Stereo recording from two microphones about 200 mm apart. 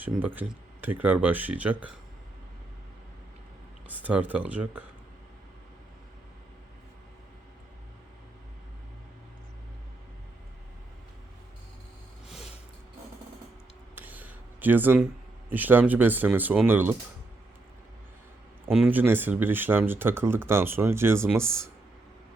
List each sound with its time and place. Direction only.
0.0 s speech: 10° right (ahead or behind)
3.8 s speech: 10° right (ahead or behind)
13.9 s a sound: 10° right (ahead or behind)
15.4 s speech: 10° right (ahead or behind)
18.7 s speech: 5° right (ahead or behind)